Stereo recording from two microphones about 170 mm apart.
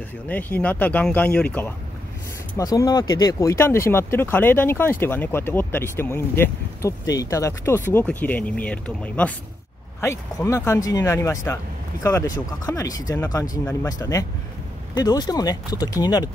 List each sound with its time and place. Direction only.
0.3 s speech: 10° left (ahead or behind)
2.5 s speech: 20° left (ahead or behind)